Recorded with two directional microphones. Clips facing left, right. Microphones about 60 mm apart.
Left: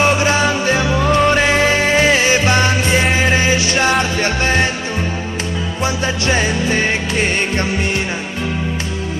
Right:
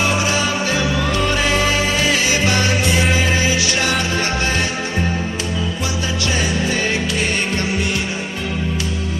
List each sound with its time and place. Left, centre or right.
0.0 s music: left
5.8 s music: left